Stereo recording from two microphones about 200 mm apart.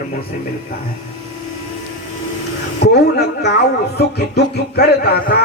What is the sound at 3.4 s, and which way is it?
Speech, 55° left (ahead or behind).